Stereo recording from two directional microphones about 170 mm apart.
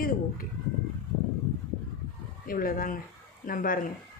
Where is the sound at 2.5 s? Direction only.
55° left (ahead or behind).